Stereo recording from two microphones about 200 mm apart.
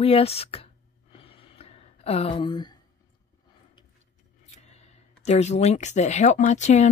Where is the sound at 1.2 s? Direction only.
30° left (ahead or behind).